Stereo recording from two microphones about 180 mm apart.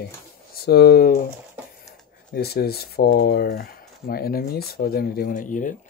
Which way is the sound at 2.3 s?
60° left (ahead or behind).